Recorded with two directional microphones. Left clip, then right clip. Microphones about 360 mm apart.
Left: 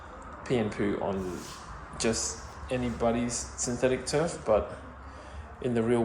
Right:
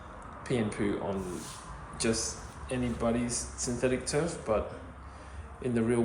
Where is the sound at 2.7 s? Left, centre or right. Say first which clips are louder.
Left 3 dB; centre.